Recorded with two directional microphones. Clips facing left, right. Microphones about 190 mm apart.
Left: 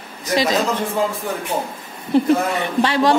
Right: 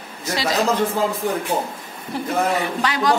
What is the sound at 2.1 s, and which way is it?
A woman's voice, 25° left (ahead or behind).